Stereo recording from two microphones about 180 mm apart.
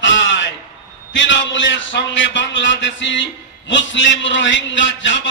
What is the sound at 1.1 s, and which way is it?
A man's voice, 90° left.